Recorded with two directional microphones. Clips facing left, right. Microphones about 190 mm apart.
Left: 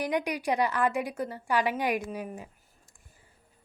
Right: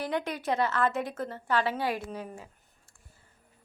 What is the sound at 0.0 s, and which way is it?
A woman's voice, 15° left (ahead or behind).